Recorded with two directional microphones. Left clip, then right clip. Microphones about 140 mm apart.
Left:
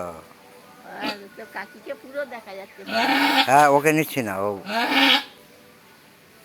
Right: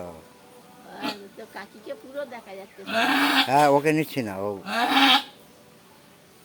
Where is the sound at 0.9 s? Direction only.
20° left (ahead or behind).